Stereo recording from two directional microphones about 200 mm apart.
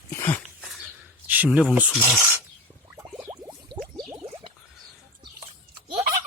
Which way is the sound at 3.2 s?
10° right (ahead or behind).